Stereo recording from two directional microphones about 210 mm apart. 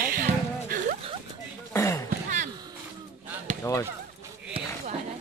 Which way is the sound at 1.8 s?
15° left (ahead or behind).